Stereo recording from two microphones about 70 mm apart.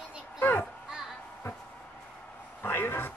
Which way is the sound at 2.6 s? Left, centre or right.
Left.